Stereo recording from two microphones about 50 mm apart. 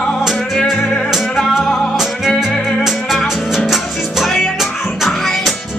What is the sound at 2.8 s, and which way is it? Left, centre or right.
Music, centre.